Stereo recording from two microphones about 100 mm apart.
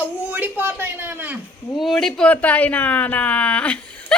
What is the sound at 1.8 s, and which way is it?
Speech, centre (ahead or behind).